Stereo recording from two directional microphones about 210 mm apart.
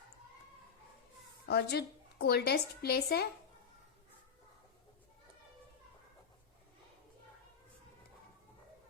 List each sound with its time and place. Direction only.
1.5 s a woman's voice: 50° left (ahead or behind)